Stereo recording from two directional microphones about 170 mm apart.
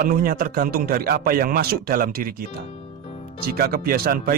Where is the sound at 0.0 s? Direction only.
55° right (ahead or behind).